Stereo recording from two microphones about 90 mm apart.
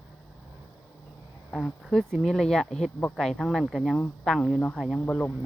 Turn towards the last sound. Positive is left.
turn(degrees=15)  # may be behind; listen again after turning